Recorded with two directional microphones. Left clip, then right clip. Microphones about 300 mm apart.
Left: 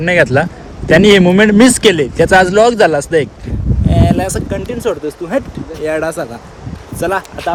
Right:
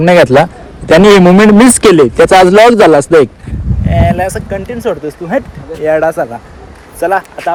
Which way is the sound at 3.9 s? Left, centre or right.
Centre.